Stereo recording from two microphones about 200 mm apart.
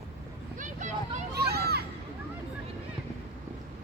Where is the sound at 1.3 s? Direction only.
50° right (ahead or behind).